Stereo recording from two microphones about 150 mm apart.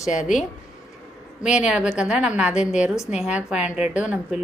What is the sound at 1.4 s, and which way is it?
A woman's voice, 5° right (ahead or behind).